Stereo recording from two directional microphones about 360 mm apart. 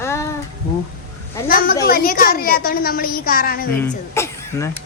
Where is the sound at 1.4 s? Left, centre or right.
Left.